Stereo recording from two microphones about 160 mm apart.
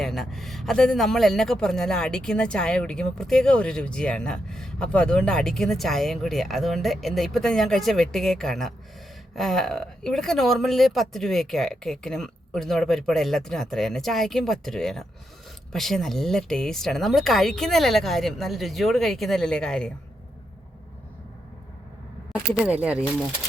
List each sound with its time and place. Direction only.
0.0 s a man's voice: centre (ahead or behind)
22.3 s speech: 5° right (ahead or behind)